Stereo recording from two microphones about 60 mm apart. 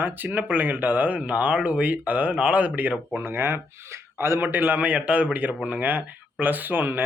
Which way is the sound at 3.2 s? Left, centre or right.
Right.